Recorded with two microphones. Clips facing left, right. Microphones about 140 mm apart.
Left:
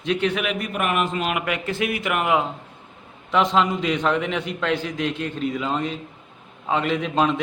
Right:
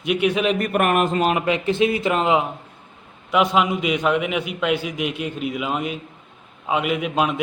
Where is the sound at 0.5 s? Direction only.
50° right (ahead or behind).